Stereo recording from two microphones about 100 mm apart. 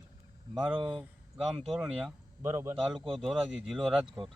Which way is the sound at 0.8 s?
55° right (ahead or behind).